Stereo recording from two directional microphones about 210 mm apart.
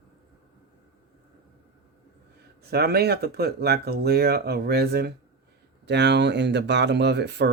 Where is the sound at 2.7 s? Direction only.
50° right (ahead or behind).